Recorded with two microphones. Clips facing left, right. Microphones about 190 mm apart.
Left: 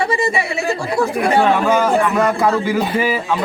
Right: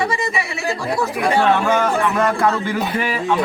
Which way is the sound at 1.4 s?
10° left (ahead or behind).